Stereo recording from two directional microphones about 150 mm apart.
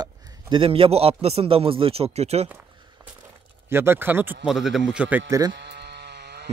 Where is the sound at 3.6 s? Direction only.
15° right (ahead or behind).